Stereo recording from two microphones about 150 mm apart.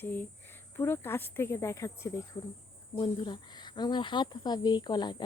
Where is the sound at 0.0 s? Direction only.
15° left (ahead or behind).